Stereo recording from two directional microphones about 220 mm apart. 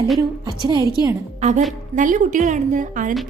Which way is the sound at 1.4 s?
30° right (ahead or behind).